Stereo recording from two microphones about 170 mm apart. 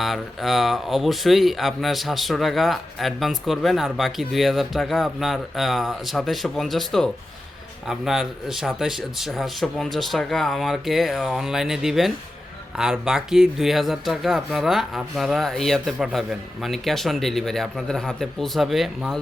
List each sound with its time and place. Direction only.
0.0 s speech: centre (ahead or behind)